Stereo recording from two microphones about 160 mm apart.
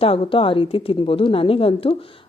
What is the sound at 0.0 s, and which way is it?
Speech, 35° left (ahead or behind).